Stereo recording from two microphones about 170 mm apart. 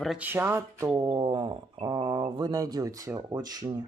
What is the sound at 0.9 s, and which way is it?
Mantra, 25° right (ahead or behind).